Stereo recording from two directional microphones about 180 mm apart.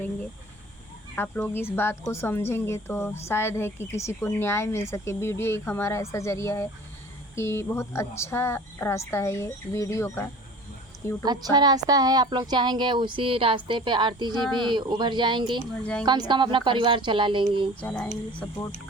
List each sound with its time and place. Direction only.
1.1 s speech: 10° left (ahead or behind)
11.2 s a woman's voice: 20° right (ahead or behind)
17.7 s speech: 5° left (ahead or behind)